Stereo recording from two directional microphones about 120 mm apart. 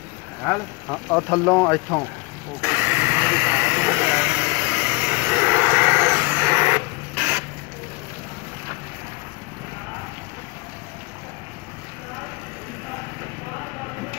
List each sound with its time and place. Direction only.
0.8 s speech: 10° left (ahead or behind)
2.6 s vehicle: 15° right (ahead or behind)